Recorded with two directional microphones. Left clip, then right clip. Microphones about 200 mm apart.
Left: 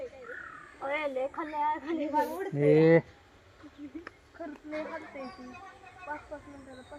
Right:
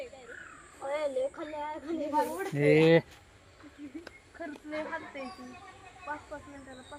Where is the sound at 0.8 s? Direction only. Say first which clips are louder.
Even; 25° left (ahead or behind).